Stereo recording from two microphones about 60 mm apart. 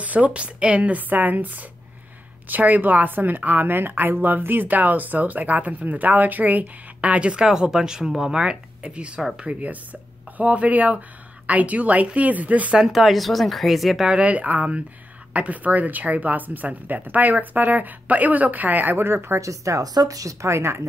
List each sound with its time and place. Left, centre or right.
0.0 s speech: right
12.7 s speech: centre
14.0 s speech: centre; by 19.4 s right
19.4 s a woman's voice: right